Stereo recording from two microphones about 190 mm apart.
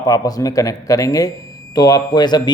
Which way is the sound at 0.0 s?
20° left (ahead or behind).